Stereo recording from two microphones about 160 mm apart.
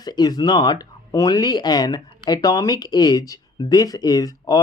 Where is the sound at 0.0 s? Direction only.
25° left (ahead or behind).